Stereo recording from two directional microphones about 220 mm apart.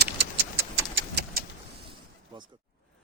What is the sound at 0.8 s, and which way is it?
Vehicle, 55° right (ahead or behind).